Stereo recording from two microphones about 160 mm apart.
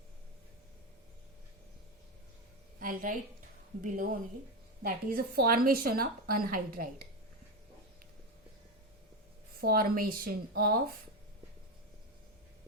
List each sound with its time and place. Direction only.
2.8 s a woman's voice: 55° right (ahead or behind)
9.6 s a woman's voice: 70° right (ahead or behind)